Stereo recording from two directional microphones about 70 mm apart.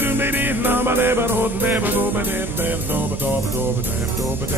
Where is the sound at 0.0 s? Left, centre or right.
Right.